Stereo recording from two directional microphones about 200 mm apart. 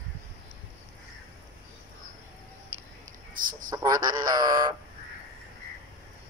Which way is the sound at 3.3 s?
45° right (ahead or behind).